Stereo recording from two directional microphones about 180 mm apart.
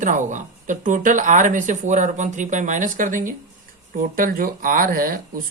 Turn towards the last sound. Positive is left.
turn(degrees=-50)  # may be behind; listen again after turning